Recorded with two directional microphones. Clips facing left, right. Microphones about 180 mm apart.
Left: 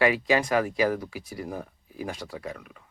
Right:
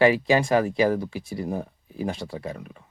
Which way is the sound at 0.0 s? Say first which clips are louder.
Right 4 dB; 30° right (ahead or behind).